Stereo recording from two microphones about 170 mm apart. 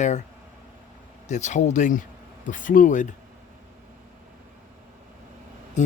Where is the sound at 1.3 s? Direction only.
45° left (ahead or behind).